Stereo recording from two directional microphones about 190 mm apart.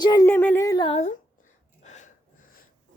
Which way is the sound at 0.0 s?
25° left (ahead or behind).